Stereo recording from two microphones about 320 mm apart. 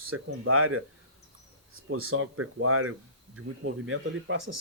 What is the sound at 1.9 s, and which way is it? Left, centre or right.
Speech, right.